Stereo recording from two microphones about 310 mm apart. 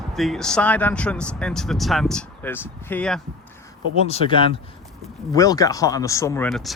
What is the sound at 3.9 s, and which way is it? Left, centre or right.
Speech, centre.